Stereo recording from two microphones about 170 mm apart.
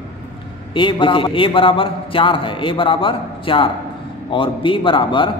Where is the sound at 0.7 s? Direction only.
30° left (ahead or behind).